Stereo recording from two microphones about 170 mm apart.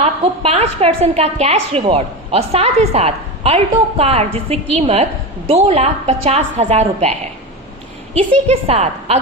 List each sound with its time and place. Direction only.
0.0 s a woman's voice: 35° right (ahead or behind)
8.4 s a woman's voice: 35° right (ahead or behind)